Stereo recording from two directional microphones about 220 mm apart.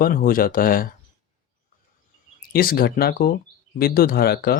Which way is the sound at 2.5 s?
40° left (ahead or behind).